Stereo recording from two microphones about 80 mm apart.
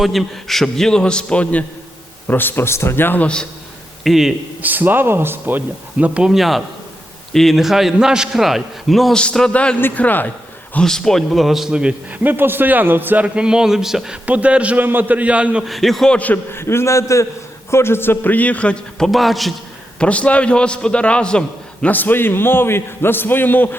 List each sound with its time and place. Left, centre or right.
0.0 s a man's voice: centre; by 3.2 s left
4.0 s a man's voice: centre
4.6 s a man's voice: right
6.3 s a man's voice: centre; by 10.3 s left
10.8 s a man's voice: centre
12.2 s a man's voice: right; by 14.2 s centre
14.3 s a man's voice: centre
15.6 s a man's voice: centre
16.1 s a man's voice: left; by 19.5 s centre
20.0 s a man's voice: centre
21.9 s a man's voice: left